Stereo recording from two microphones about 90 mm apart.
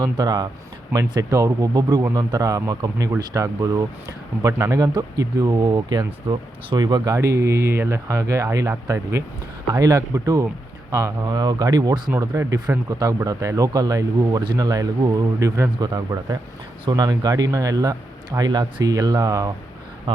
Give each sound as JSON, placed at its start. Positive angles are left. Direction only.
{"t": 0.0, "sound": "speech", "side_deg": -45}
{"t": 1.1, "sound": "speech", "side_deg": -35}
{"t": 6.1, "sound": "speech", "side_deg": -80}
{"t": 6.7, "sound": "speech", "side_deg": -50}
{"t": 20.1, "sound": "speech", "side_deg": -70}